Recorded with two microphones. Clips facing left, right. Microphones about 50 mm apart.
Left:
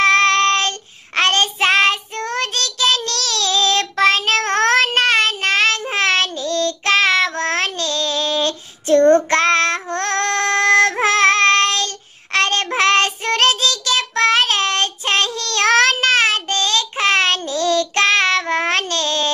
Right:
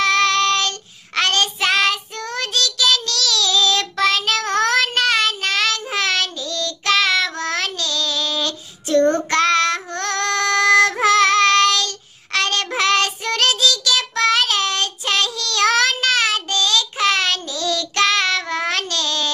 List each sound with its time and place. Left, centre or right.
0.0 s child singing: left